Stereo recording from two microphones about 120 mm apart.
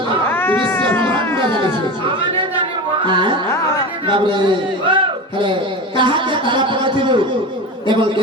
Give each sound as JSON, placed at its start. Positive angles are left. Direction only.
{"t": 0.3, "sound": "cat", "side_deg": 20}
{"t": 3.1, "sound": "music", "side_deg": -40}
{"t": 4.1, "sound": "a man's voice", "side_deg": -40}
{"t": 6.0, "sound": "a man's voice", "side_deg": -40}